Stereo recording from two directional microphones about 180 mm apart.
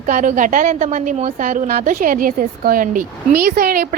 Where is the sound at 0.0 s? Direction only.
45° right (ahead or behind).